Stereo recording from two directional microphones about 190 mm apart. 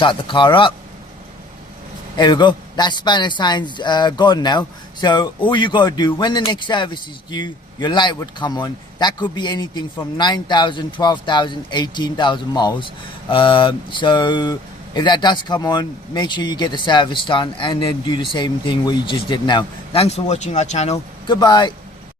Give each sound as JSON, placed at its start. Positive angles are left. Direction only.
{"t": 0.0, "sound": "a man's voice", "side_deg": 25}
{"t": 2.1, "sound": "a man's voice", "side_deg": 25}
{"t": 21.2, "sound": "a man's voice", "side_deg": 20}